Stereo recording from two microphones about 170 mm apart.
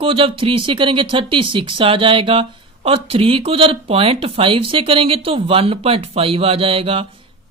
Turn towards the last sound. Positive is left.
turn(degrees=-35)  # may be behind; listen again after turning